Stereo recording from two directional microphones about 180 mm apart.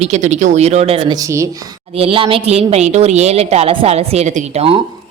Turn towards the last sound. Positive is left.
turn(degrees=-35)  # may be behind; listen again after turning